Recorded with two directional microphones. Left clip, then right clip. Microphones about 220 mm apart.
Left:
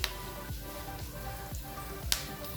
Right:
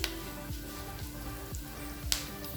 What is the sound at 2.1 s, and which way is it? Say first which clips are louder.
Music: even; 5° right (ahead or behind).